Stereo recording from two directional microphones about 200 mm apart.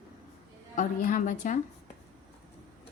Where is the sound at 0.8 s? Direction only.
40° left (ahead or behind).